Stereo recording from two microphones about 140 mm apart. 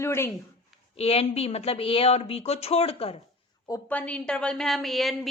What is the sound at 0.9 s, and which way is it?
A woman's voice, 45° left (ahead or behind).